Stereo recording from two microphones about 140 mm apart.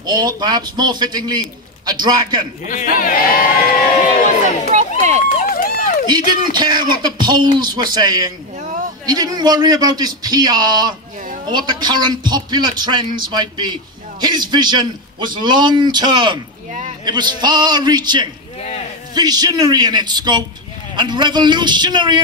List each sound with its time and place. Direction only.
0.0 s a man's voice: 30° right (ahead or behind)
2.6 s a man's voice: 70° left (ahead or behind)
4.6 s crowd: 55° right (ahead or behind)
5.2 s run: 75° left (ahead or behind)
6.0 s a man's voice: 30° right (ahead or behind)